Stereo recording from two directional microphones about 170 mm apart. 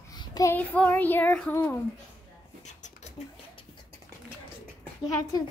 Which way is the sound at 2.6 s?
45° left (ahead or behind).